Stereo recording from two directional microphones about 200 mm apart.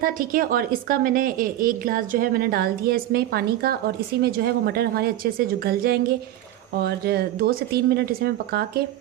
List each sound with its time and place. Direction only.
0.0 s a woman's voice: 45° right (ahead or behind)